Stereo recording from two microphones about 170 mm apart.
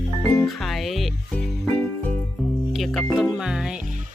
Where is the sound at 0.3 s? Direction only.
Centre (ahead or behind).